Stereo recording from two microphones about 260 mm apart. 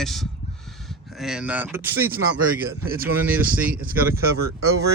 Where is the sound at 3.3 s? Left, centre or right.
Centre.